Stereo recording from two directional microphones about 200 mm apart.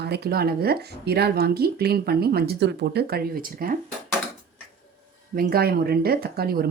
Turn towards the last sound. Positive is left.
turn(degrees=-50)  # may be behind; listen again after turning